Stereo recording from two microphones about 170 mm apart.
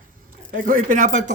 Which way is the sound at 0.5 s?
55° right (ahead or behind).